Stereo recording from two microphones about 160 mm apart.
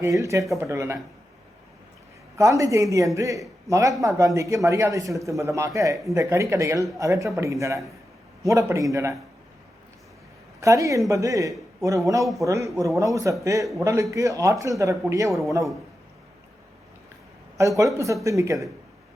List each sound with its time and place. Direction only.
0.0 s speech: 20° right (ahead or behind)
2.4 s a man's voice: 20° right (ahead or behind)
10.6 s speech: 20° right (ahead or behind)
15.3 s a man's voice: centre (ahead or behind)
17.6 s speech: 20° right (ahead or behind)